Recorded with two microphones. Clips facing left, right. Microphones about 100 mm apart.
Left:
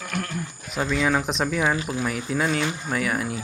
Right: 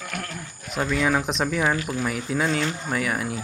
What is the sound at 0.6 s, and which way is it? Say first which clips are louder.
Speech: even; centre (ahead or behind).